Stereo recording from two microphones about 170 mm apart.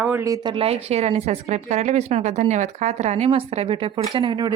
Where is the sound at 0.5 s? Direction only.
35° right (ahead or behind).